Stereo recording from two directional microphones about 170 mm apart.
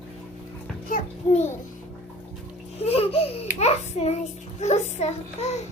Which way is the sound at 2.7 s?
35° left (ahead or behind).